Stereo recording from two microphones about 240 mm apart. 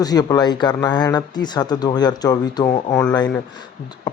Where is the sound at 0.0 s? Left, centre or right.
Centre.